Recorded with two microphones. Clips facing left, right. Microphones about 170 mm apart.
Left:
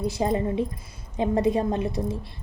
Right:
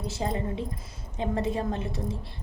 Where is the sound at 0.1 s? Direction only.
15° left (ahead or behind).